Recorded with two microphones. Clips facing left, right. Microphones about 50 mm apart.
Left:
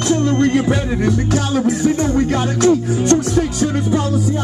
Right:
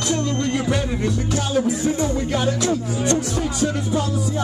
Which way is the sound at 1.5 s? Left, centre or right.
Left.